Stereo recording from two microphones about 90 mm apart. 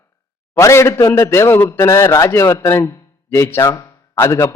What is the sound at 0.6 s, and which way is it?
A man's voice, 30° left (ahead or behind).